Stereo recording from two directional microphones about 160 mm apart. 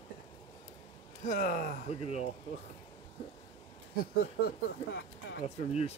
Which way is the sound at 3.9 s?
70° left (ahead or behind).